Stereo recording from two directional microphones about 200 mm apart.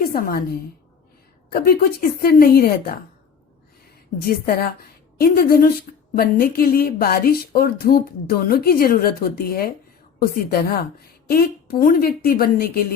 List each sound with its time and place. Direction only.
0.1 s speech: 45° left (ahead or behind)
4.2 s speech: 50° left (ahead or behind)